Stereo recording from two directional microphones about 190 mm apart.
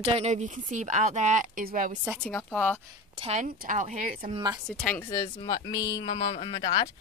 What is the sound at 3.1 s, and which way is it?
Speech, 35° right (ahead or behind).